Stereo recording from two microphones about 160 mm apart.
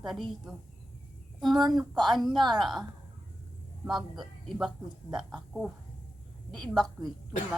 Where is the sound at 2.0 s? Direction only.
Centre (ahead or behind).